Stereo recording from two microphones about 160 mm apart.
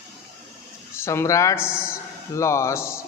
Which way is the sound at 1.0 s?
15° left (ahead or behind).